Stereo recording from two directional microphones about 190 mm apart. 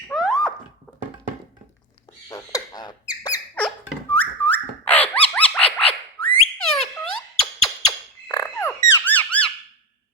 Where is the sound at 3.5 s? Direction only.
10° left (ahead or behind).